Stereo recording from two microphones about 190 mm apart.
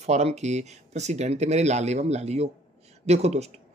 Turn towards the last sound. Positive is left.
turn(degrees=-35)  # may be behind; listen again after turning